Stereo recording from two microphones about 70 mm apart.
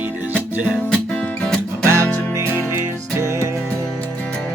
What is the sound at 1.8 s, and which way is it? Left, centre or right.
Music, right.